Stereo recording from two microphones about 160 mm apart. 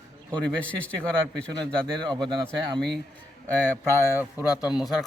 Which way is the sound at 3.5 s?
10° left (ahead or behind).